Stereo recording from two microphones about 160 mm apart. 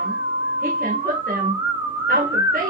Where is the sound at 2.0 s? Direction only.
60° right (ahead or behind).